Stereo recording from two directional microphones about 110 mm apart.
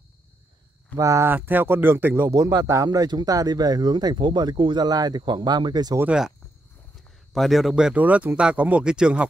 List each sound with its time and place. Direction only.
0.9 s speech: 30° right (ahead or behind)
2.3 s speech: 35° right (ahead or behind)
7.3 s speech: centre (ahead or behind)